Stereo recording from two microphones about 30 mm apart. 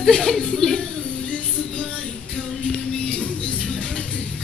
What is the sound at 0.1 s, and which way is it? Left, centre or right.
Speech, centre.